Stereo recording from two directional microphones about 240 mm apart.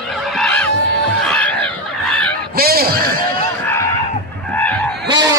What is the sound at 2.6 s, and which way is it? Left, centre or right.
Speech, right.